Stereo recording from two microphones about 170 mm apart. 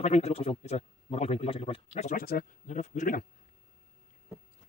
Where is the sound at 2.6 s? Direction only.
45° left (ahead or behind).